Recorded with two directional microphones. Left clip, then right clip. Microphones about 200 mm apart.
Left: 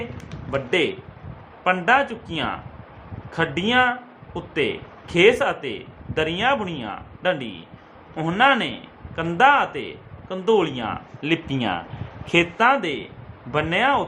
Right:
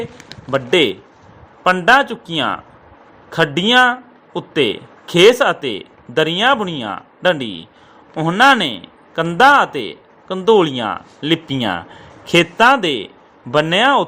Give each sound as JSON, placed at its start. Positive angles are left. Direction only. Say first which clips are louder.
{"t": 0.5, "sound": "speech", "louder": "right 7 dB", "side_deg": -30}